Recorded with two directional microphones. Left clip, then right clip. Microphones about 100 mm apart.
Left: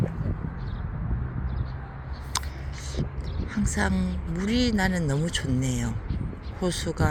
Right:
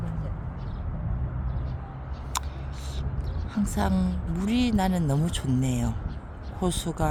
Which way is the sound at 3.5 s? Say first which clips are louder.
Left 1 dB; 20° right (ahead or behind).